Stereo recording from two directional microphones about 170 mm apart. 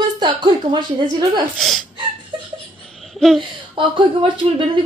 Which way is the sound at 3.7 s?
30° right (ahead or behind).